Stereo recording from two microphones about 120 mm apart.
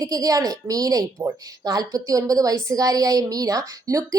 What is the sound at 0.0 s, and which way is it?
A woman's voice, 30° right (ahead or behind).